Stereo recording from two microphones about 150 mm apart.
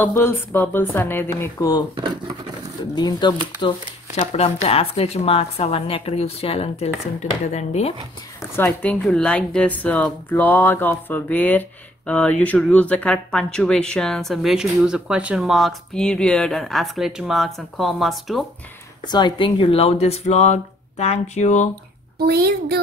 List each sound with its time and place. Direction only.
0.0 s speech: 15° left (ahead or behind)
2.9 s speech: 30° left (ahead or behind)
4.1 s speech: 45° left (ahead or behind)
8.6 s speech: 5° left (ahead or behind)
19.0 s speech: 30° left (ahead or behind); by 21.6 s 50° left (ahead or behind)
22.2 s a child's voice: 90° right